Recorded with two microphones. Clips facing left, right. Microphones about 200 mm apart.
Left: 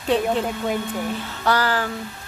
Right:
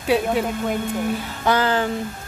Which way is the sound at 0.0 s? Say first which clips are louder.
Right 1 dB; 10° right (ahead or behind).